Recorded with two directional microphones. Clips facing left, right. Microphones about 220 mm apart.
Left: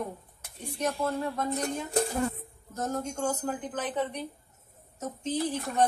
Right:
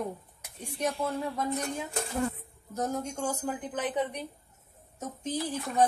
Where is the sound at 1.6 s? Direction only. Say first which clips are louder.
Left 5 dB; 35° left (ahead or behind).